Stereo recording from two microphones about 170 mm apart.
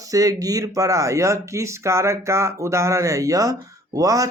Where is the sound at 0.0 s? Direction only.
20° right (ahead or behind).